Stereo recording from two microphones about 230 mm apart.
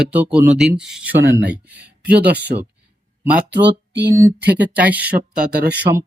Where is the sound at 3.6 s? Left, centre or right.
Right.